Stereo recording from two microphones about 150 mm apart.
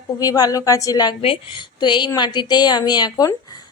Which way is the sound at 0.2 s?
25° left (ahead or behind).